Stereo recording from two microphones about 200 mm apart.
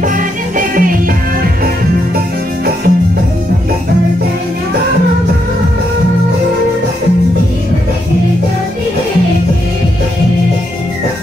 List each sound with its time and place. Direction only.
0.6 s music: 45° right (ahead or behind)
2.1 s music: 50° right (ahead or behind)